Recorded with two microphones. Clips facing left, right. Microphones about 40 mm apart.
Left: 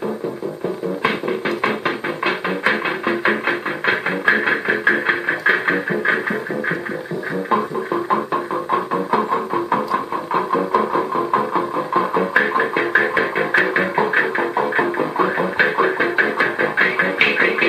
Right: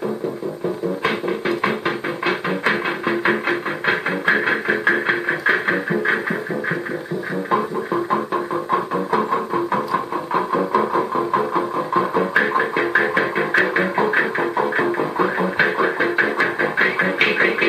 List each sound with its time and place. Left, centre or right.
1.6 s music: centre
7.5 s music: centre